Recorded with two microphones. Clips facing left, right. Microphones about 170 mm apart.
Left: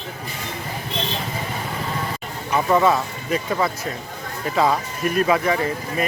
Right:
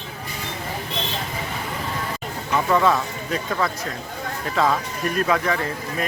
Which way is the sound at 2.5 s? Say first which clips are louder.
Left 2 dB; 15° left (ahead or behind).